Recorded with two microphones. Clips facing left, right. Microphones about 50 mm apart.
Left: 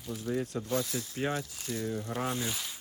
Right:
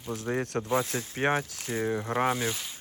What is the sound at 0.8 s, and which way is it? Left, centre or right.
Speech, right.